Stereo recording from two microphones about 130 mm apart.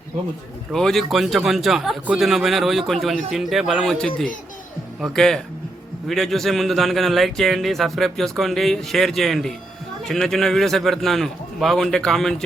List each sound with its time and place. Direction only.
0.7 s a man's voice: centre (ahead or behind)